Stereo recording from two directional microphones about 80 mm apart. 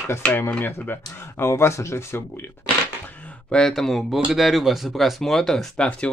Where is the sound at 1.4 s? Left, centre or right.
Left.